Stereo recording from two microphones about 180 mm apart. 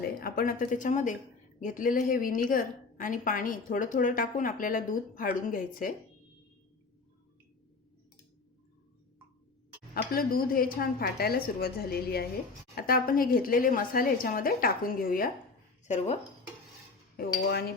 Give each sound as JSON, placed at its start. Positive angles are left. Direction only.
{"t": 0.2, "sound": "a woman's voice", "side_deg": 55}
{"t": 9.9, "sound": "a woman's voice", "side_deg": 55}
{"t": 15.9, "sound": "speech", "side_deg": 35}
{"t": 17.2, "sound": "a woman's voice", "side_deg": 60}